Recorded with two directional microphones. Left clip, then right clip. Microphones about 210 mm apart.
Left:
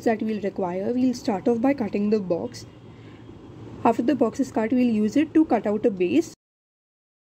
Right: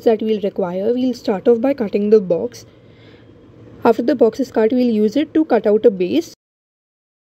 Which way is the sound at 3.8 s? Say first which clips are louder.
Right 7 dB; 30° right (ahead or behind).